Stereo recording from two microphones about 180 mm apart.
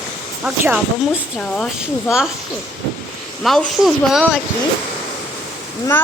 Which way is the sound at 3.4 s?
Centre (ahead or behind).